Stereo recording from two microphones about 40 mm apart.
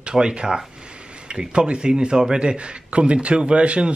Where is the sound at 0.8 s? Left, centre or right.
Right.